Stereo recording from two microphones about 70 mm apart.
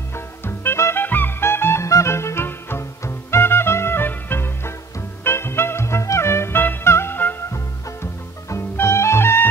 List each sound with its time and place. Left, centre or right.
0.1 s music: left
7.5 s music: left